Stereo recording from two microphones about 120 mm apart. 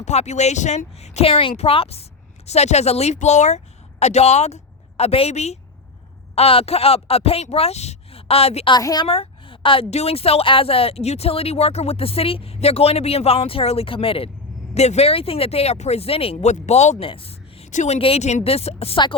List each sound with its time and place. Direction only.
0.0 s a woman's voice: 70° left (ahead or behind)
4.0 s a woman's voice: 65° left (ahead or behind)
6.3 s a woman's voice: 55° left (ahead or behind)
8.7 s a woman's voice: 35° left (ahead or behind)
9.0 s a woman's voice: 50° left (ahead or behind)
14.8 s a woman's voice: 60° left (ahead or behind)
17.0 s a sound: 50° left (ahead or behind)
17.7 s a woman's voice: 75° left (ahead or behind); by 19.0 s 55° left (ahead or behind)